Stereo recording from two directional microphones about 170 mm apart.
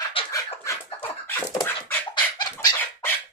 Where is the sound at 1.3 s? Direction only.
10° left (ahead or behind).